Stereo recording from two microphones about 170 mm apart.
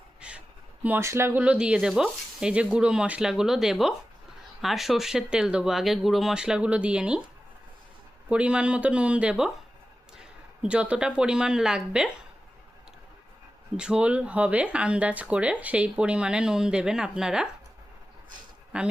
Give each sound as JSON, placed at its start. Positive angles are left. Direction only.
{"t": 0.2, "sound": "speech", "side_deg": -5}
{"t": 8.3, "sound": "a woman's voice", "side_deg": -5}
{"t": 13.7, "sound": "speech", "side_deg": -5}
{"t": 18.7, "sound": "speech", "side_deg": -5}